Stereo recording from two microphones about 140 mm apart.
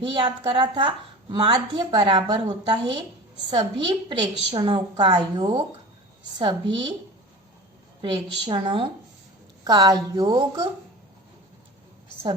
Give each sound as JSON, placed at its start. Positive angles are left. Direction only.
{"t": 0.0, "sound": "a woman's voice", "side_deg": -35}
{"t": 8.0, "sound": "a woman's voice", "side_deg": -35}